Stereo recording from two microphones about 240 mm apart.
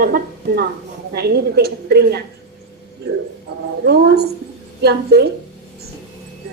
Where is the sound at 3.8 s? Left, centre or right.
Right.